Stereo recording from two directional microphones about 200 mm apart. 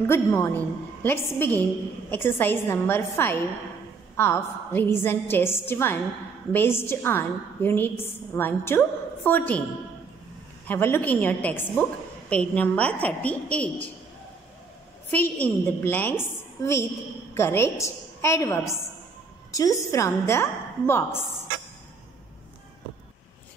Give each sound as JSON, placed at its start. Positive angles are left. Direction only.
{"t": 0.0, "sound": "a woman's voice", "side_deg": 15}
{"t": 10.7, "sound": "a woman's voice", "side_deg": 10}
{"t": 15.0, "sound": "a woman's voice", "side_deg": 10}